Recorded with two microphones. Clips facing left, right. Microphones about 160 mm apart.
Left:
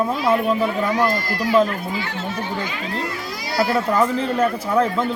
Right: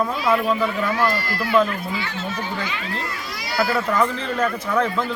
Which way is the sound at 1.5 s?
35° left (ahead or behind).